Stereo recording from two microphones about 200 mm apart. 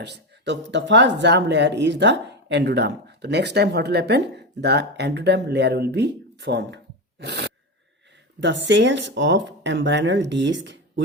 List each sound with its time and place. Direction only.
0.0 s speech: 60° right (ahead or behind)
7.2 s a sound: 60° right (ahead or behind)
8.4 s speech: 60° right (ahead or behind)